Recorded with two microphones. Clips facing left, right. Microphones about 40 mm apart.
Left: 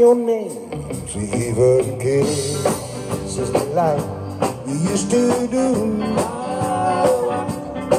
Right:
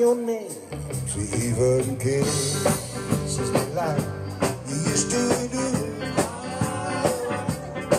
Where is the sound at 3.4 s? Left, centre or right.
Left.